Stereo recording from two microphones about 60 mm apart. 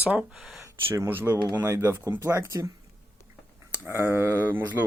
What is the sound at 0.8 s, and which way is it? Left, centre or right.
Speech, right.